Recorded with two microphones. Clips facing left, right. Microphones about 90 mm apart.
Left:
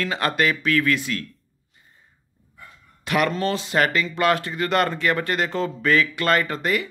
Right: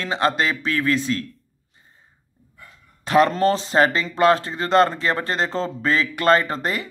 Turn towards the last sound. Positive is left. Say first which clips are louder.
# right 1 dB
turn(degrees=-30)  # may be behind; listen again after turning